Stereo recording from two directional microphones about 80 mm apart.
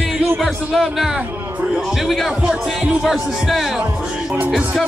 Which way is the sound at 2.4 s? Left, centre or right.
Centre.